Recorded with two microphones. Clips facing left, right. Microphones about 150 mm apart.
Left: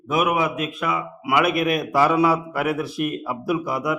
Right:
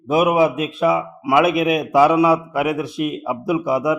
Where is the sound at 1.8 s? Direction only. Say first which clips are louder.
Right 5 dB; 20° right (ahead or behind).